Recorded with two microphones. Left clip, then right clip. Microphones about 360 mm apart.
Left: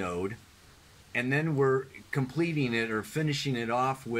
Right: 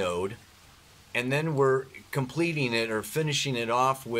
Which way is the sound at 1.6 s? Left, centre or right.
Right.